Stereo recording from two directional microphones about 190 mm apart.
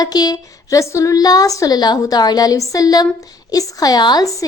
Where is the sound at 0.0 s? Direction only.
20° left (ahead or behind).